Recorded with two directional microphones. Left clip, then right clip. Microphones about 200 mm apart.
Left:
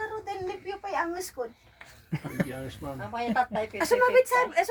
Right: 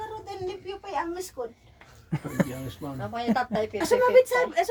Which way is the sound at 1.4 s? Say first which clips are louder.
Even; 5° right (ahead or behind).